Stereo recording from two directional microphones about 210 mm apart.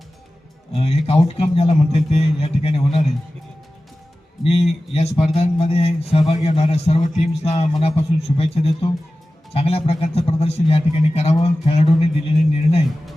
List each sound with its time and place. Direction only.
0.7 s speech: 25° left (ahead or behind)
4.4 s speech: 30° left (ahead or behind)